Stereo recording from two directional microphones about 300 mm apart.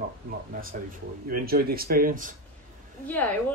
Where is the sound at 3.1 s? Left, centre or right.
Centre.